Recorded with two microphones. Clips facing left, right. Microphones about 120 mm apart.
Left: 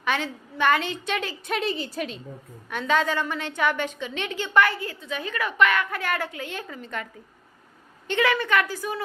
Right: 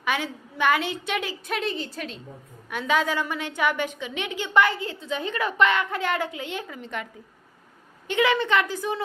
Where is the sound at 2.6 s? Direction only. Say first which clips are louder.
Even; 10° right (ahead or behind).